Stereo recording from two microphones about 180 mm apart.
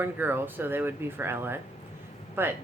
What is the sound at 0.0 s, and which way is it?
Speech, 10° right (ahead or behind).